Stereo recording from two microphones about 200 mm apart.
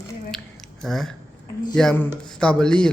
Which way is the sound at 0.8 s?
Centre (ahead or behind).